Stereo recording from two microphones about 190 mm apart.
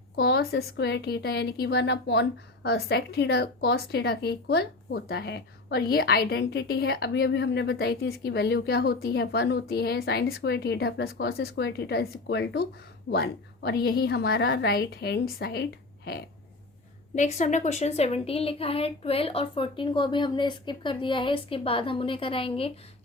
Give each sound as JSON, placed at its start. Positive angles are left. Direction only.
{"t": 0.2, "sound": "speech", "side_deg": 60}
{"t": 17.2, "sound": "a woman's voice", "side_deg": 40}